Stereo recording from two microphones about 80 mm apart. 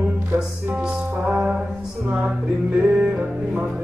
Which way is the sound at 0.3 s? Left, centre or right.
Right.